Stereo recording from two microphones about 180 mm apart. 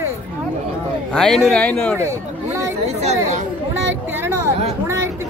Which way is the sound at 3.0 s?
40° right (ahead or behind).